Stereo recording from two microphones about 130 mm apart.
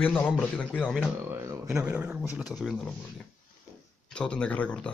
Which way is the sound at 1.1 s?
15° right (ahead or behind).